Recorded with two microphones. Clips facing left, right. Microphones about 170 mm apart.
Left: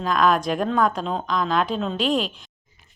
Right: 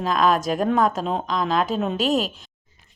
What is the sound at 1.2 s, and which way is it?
A woman's voice, 35° right (ahead or behind).